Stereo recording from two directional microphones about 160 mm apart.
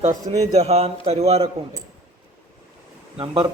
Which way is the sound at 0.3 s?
40° right (ahead or behind).